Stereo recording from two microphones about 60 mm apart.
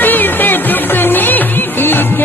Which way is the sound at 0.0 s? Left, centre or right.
Left.